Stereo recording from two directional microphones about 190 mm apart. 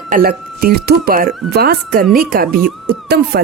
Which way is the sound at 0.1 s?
50° right (ahead or behind).